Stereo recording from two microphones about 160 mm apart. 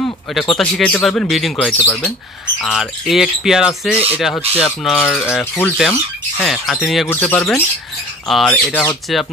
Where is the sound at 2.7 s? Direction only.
Centre (ahead or behind).